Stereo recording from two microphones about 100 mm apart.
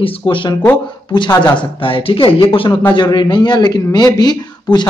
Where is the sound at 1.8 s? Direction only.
60° left (ahead or behind).